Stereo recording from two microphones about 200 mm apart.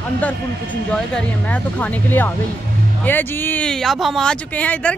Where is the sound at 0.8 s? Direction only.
5° left (ahead or behind).